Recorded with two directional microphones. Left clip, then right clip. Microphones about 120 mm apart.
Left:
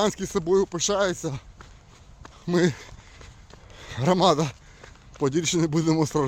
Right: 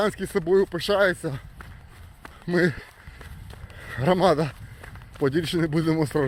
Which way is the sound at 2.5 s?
40° left (ahead or behind).